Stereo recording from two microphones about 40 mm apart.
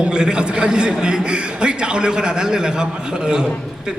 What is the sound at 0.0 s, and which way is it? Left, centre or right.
A man's voice, right.